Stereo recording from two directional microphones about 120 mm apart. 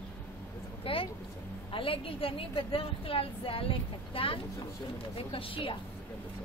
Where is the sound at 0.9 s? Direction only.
50° left (ahead or behind).